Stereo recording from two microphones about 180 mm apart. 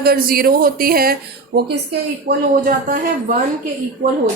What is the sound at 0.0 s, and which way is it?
Speech, 55° right (ahead or behind).